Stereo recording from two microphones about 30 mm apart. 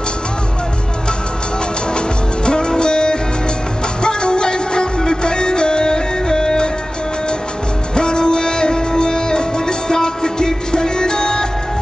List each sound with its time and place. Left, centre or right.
2.0 s music: left
7.9 s music: left